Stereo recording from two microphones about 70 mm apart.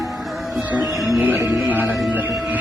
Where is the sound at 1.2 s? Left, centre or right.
Right.